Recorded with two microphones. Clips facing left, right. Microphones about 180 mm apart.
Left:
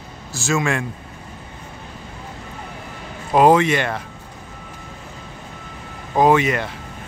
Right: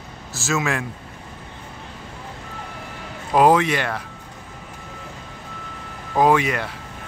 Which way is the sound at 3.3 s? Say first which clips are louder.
Left 2 dB; 5° right (ahead or behind).